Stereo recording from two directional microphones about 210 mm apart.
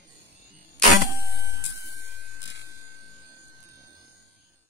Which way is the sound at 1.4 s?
60° left (ahead or behind).